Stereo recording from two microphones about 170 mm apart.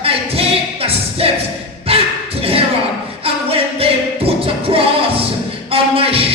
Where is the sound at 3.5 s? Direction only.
35° right (ahead or behind).